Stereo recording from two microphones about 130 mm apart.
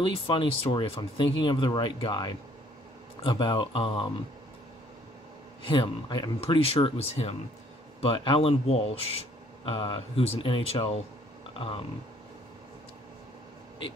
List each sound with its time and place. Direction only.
0.3 s speech: 40° left (ahead or behind)
5.7 s speech: 35° left (ahead or behind)
9.7 s speech: 40° left (ahead or behind)